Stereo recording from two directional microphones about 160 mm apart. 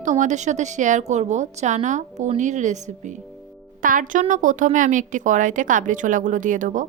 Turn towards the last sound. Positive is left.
turn(degrees=-55)  # may be behind; listen again after turning